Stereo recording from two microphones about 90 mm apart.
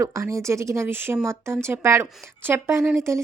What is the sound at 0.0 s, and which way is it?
Speech, 35° right (ahead or behind).